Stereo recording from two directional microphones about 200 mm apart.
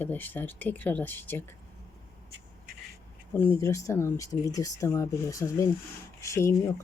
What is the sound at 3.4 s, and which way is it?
Speech, 15° left (ahead or behind).